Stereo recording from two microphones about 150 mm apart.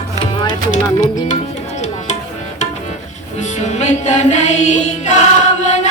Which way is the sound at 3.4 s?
50° left (ahead or behind).